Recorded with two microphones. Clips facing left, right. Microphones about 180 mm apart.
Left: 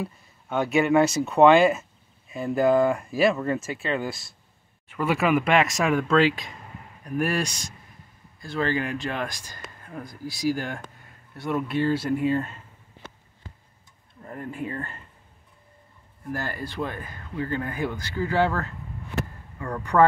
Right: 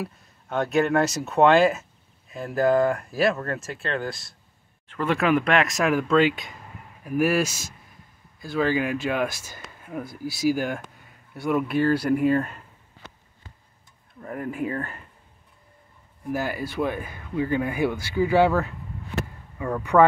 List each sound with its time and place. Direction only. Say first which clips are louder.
0.0 s speech: even; centre (ahead or behind)
14.2 s speech: right 4 dB; 70° right (ahead or behind)
14.5 s speech: right 3 dB; centre (ahead or behind)
16.3 s speech: right 4 dB; 5° right (ahead or behind)